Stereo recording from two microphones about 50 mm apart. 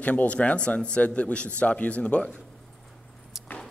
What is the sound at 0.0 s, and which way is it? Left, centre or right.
Speech, left.